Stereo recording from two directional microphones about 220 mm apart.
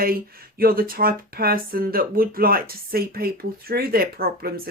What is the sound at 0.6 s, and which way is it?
Speech, 40° right (ahead or behind).